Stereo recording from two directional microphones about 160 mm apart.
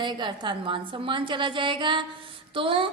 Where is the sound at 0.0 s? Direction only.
30° right (ahead or behind).